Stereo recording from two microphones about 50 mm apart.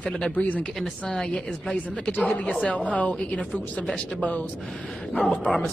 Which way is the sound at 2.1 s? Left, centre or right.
Left.